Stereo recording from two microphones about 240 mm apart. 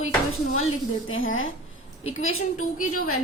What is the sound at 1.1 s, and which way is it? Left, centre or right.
A woman's voice, left.